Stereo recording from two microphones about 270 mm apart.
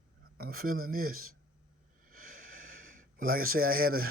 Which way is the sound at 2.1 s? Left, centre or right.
Right.